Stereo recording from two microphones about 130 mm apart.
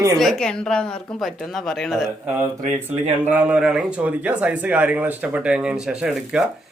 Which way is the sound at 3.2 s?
15° right (ahead or behind).